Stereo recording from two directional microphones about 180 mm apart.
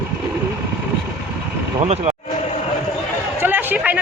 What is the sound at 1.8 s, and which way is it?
Speech, 35° right (ahead or behind).